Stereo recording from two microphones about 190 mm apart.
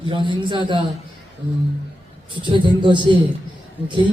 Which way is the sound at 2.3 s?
25° right (ahead or behind).